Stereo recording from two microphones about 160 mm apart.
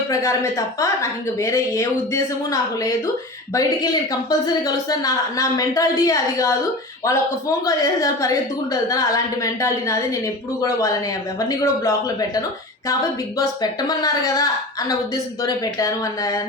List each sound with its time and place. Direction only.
0.1 s speech: 20° left (ahead or behind)
13.4 s speech: 25° left (ahead or behind)